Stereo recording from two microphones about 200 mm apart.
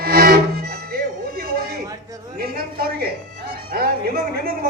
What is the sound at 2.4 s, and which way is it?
Speech, 50° right (ahead or behind).